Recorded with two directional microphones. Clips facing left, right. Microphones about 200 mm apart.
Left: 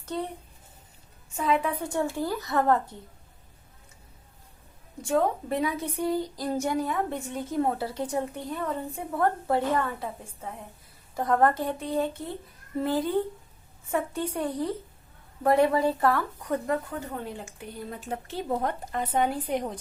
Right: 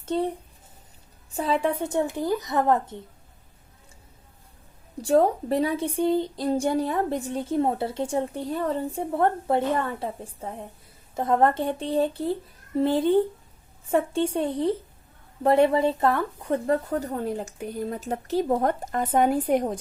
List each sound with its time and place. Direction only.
0.0 s a sound: 25° right (ahead or behind)
1.3 s a woman's voice: 30° right (ahead or behind)
5.0 s a woman's voice: 35° right (ahead or behind)